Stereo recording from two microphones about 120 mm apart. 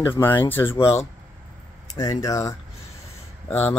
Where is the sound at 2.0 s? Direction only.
30° left (ahead or behind).